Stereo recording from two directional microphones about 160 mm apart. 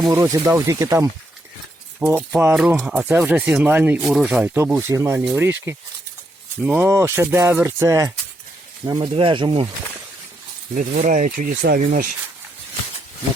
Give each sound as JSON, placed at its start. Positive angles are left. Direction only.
{"t": 0.0, "sound": "speech", "side_deg": -20}
{"t": 8.8, "sound": "speech", "side_deg": -30}
{"t": 10.8, "sound": "speech", "side_deg": -55}